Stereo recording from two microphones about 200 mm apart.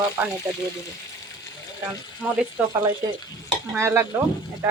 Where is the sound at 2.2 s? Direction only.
10° right (ahead or behind).